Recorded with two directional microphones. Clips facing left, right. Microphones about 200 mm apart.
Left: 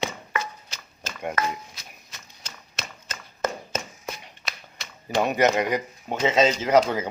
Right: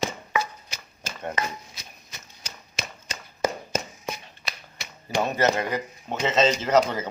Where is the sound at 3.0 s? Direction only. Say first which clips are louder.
Right 2 dB; 10° right (ahead or behind).